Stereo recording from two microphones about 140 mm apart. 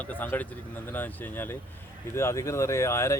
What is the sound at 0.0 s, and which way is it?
Speech, 10° left (ahead or behind).